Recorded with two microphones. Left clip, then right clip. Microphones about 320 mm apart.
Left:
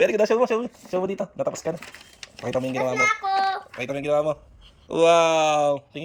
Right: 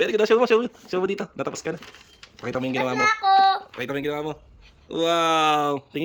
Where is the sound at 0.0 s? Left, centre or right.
Centre.